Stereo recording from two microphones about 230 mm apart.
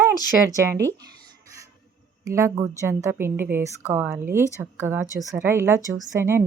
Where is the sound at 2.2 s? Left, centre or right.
Centre.